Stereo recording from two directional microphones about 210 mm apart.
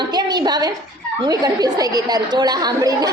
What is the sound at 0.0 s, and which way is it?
A woman's voice, 20° right (ahead or behind).